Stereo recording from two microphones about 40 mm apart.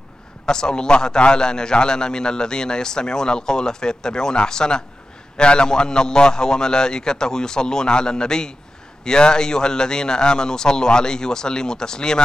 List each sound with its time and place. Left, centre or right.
0.5 s a man's voice: centre